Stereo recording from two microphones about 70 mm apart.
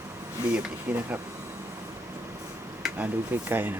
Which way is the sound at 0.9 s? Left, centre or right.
Centre.